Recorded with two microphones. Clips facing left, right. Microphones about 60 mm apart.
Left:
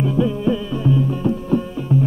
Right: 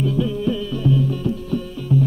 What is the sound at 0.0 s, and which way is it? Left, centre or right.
Music, left.